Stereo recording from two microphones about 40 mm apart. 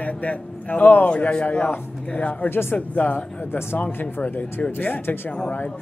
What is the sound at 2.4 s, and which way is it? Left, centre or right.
Speech, left.